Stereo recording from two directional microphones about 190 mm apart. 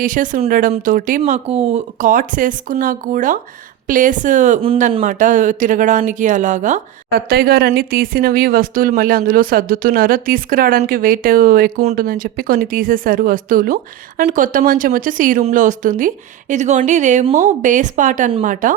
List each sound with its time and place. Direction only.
0.0 s speech: 45° right (ahead or behind)
1.2 s speech: 30° right (ahead or behind)
4.6 s speech: 30° right (ahead or behind)
5.0 s speech: 45° right (ahead or behind)